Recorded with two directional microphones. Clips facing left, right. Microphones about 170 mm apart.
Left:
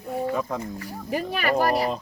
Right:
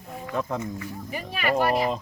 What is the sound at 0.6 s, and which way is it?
Speech, 35° left (ahead or behind).